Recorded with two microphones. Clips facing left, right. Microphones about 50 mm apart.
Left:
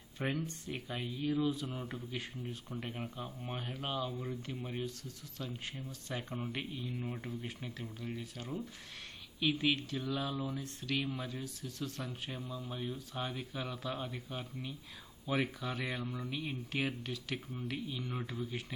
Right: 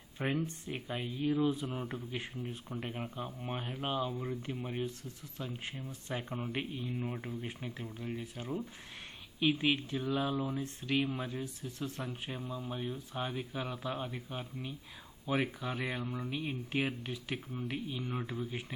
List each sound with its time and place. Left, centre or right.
0.2 s speech: centre
2.7 s speech: centre
6.1 s speech: centre
7.4 s speech: right